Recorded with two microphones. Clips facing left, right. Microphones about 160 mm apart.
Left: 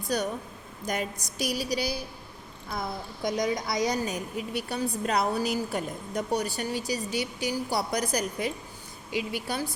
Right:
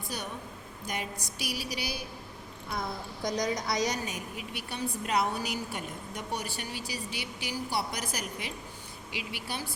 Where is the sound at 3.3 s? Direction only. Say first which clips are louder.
Left 2 dB; 25° left (ahead or behind).